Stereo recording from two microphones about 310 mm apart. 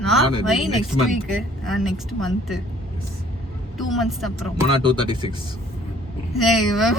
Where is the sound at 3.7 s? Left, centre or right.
Centre.